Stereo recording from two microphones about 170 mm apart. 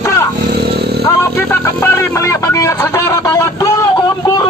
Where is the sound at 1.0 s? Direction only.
10° left (ahead or behind).